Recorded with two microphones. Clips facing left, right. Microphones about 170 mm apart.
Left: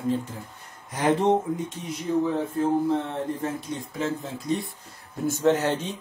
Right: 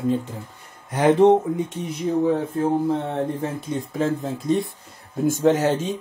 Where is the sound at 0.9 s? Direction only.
60° right (ahead or behind).